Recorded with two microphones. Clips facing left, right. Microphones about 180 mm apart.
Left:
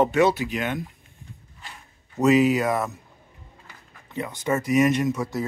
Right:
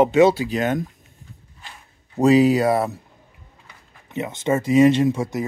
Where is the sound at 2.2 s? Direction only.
35° right (ahead or behind).